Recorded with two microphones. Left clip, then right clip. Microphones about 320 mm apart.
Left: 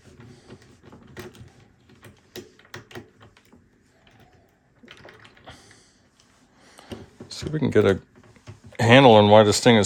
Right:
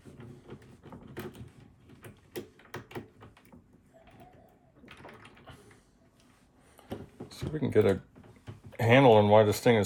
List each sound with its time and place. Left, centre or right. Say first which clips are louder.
7.3 s speech: left 8 dB; left